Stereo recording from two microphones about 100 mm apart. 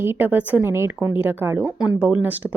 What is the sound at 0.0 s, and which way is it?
A woman's voice, 20° right (ahead or behind).